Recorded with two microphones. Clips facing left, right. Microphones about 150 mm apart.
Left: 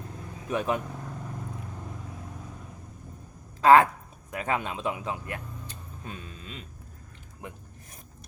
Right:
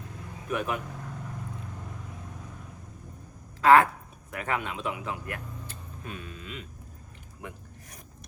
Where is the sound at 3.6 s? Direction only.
20° left (ahead or behind).